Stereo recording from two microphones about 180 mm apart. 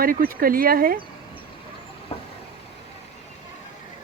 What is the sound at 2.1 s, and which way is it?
Vehicle, 30° left (ahead or behind).